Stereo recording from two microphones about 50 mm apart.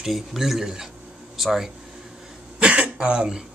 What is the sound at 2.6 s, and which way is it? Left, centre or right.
Cough, centre.